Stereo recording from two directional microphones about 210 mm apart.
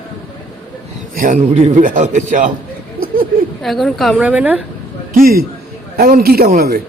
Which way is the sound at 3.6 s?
Centre (ahead or behind).